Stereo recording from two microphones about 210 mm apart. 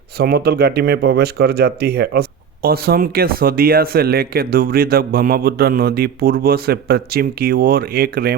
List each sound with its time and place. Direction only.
0.2 s speech: 50° right (ahead or behind)